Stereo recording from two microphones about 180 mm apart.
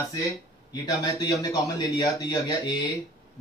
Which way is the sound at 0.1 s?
20° left (ahead or behind).